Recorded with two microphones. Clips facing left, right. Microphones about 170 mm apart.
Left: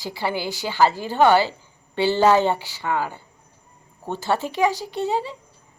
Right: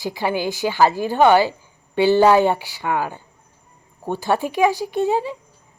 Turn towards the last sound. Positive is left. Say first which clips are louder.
# right 4 dB
turn(degrees=-15)  # may be behind; listen again after turning